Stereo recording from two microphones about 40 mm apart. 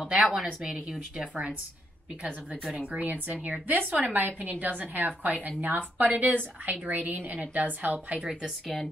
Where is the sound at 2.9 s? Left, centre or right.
Right.